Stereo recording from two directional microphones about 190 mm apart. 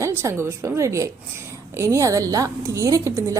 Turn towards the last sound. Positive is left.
turn(degrees=-15)  # may be behind; listen again after turning